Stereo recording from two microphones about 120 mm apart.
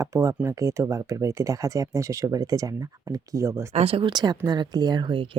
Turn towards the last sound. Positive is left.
turn(degrees=-45)  # may be behind; listen again after turning